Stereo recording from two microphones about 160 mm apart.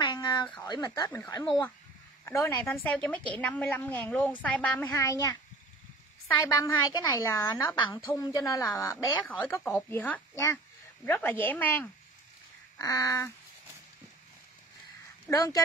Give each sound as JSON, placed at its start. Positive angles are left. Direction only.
{"t": 0.0, "sound": "a sound", "side_deg": 30}
{"t": 0.7, "sound": "a woman's voice", "side_deg": 25}
{"t": 2.2, "sound": "a woman's voice", "side_deg": 15}
{"t": 12.7, "sound": "a woman's voice", "side_deg": 20}
{"t": 15.2, "sound": "a woman's voice", "side_deg": 20}